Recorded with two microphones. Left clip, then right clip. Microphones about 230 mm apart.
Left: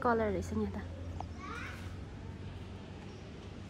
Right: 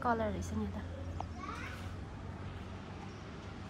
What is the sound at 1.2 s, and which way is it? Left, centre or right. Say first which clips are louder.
Children playing: even; centre.